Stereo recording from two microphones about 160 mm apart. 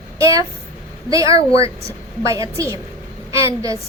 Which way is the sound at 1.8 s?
20° right (ahead or behind).